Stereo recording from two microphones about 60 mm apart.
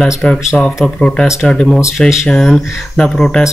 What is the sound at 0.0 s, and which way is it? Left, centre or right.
Speech, centre.